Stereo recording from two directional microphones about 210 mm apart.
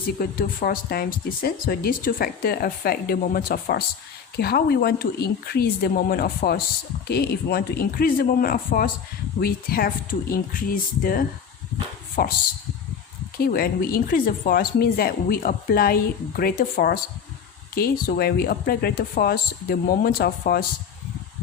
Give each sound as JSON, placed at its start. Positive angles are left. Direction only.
{"t": 0.2, "sound": "speech", "side_deg": 45}
{"t": 13.4, "sound": "speech", "side_deg": 45}